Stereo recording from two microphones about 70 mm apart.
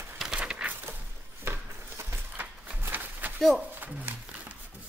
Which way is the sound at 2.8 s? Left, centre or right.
Right.